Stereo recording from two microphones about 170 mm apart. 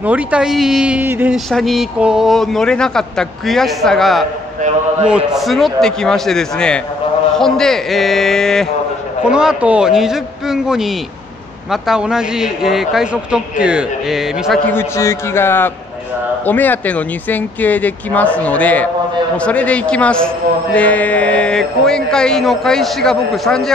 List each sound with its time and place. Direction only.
0.0 s speech: 10° right (ahead or behind)
1.5 s a man's voice: centre (ahead or behind)
14.7 s a man's voice: 15° left (ahead or behind)